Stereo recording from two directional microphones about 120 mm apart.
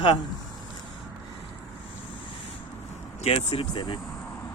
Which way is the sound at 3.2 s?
50° left (ahead or behind).